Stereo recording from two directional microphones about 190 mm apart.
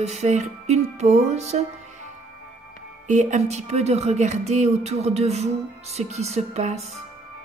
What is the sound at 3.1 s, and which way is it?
Speech, 40° right (ahead or behind).